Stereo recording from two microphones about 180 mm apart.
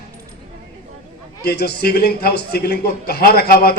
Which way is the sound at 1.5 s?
60° left (ahead or behind).